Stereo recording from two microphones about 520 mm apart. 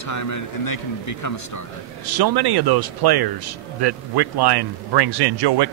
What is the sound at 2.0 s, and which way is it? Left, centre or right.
Speech, right.